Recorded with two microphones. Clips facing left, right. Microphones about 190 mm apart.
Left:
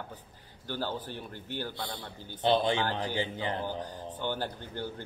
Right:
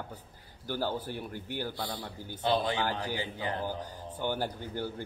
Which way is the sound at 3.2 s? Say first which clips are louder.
Left 2 dB; 25° left (ahead or behind).